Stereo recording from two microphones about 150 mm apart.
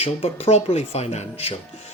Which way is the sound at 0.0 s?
40° left (ahead or behind).